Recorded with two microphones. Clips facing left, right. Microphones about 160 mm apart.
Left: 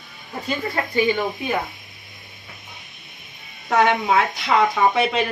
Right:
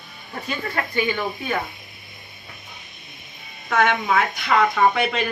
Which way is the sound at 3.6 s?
35° left (ahead or behind).